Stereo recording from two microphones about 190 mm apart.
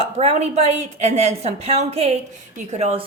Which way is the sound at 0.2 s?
35° right (ahead or behind).